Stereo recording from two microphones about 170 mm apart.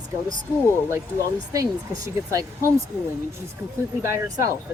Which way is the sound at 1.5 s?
20° right (ahead or behind).